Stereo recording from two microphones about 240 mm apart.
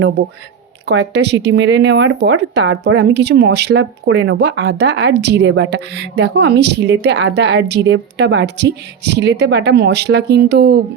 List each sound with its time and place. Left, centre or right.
0.9 s speech: right